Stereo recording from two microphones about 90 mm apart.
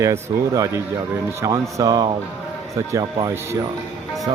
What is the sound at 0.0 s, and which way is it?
Speech, 35° right (ahead or behind).